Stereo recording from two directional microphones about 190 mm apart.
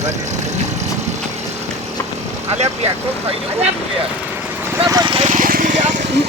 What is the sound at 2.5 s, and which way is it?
Speech, 35° right (ahead or behind).